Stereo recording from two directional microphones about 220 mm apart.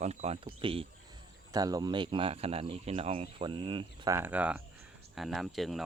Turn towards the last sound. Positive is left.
turn(degrees=0)  # may be behind; listen again after turning